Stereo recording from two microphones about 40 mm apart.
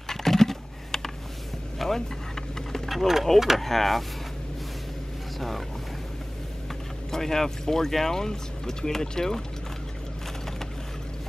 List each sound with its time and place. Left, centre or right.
0.1 s typing: centre
2.0 s a sound: centre
2.9 s speech: centre
3.6 s speech: centre
7.1 s speech: centre